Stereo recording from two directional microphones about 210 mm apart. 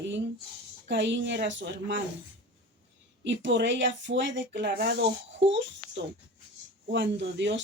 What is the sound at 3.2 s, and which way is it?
Speech, 60° right (ahead or behind).